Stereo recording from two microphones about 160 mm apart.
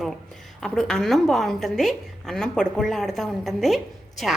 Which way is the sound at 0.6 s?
5° left (ahead or behind).